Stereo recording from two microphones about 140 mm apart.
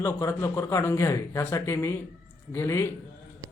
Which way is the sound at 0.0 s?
20° left (ahead or behind).